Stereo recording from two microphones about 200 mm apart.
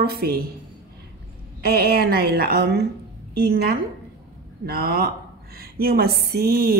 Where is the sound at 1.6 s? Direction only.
50° right (ahead or behind).